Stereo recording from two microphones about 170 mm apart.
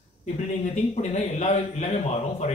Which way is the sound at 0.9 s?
40° left (ahead or behind).